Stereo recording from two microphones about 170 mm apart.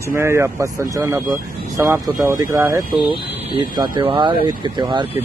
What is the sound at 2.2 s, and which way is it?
Speech, 15° right (ahead or behind).